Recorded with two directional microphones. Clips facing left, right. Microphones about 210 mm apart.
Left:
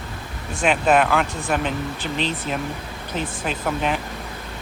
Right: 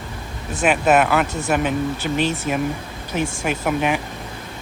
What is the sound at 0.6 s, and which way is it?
Speech, 5° right (ahead or behind).